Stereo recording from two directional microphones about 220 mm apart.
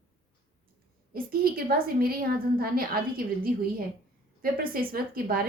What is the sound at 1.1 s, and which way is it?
A woman's voice, 40° right (ahead or behind).